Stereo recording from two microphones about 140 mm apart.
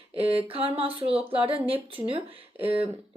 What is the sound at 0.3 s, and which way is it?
Speech, 40° right (ahead or behind).